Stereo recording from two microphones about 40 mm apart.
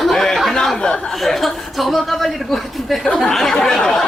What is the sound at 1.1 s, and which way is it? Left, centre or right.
Speech, centre.